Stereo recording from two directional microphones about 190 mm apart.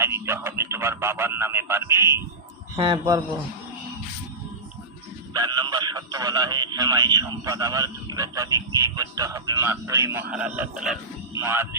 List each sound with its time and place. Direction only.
0.0 s speech: 15° right (ahead or behind)
5.3 s speech: 20° right (ahead or behind)